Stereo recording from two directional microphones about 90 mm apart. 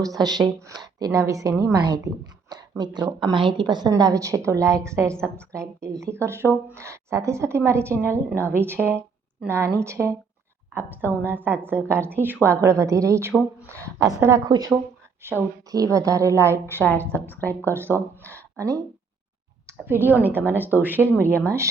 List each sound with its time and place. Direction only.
0.0 s a woman's voice: 45° right (ahead or behind)
3.3 s a woman's voice: 65° right (ahead or behind); by 14.4 s 35° right (ahead or behind)
14.4 s speech: 50° right (ahead or behind)
15.2 s speech: 25° right (ahead or behind)
15.7 s a woman's voice: 40° right (ahead or behind)
16.7 s a woman's voice: 20° left (ahead or behind)
17.7 s speech: 30° right (ahead or behind)
19.6 s a woman's voice: 25° right (ahead or behind)